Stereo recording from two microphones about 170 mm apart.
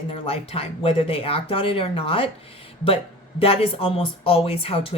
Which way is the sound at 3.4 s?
35° left (ahead or behind).